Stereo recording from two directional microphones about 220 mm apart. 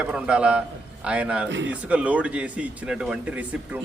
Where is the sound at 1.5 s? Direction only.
55° right (ahead or behind).